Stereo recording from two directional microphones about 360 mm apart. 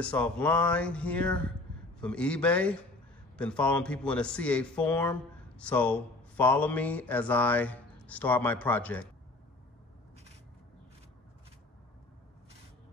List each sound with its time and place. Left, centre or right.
0.0 s mantra: centre